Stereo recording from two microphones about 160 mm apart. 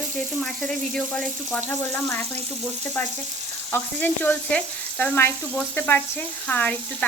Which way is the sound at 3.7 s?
10° left (ahead or behind).